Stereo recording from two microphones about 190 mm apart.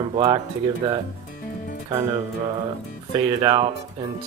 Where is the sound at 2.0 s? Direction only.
20° right (ahead or behind).